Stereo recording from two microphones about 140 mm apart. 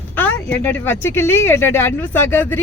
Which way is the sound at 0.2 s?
10° left (ahead or behind).